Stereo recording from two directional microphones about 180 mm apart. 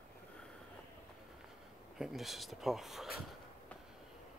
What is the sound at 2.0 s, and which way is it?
Speech, centre (ahead or behind).